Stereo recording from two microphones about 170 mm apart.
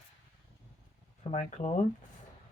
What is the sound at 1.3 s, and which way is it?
Speech, 40° left (ahead or behind).